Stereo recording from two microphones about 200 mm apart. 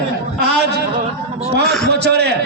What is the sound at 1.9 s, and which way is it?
Speech, 55° right (ahead or behind).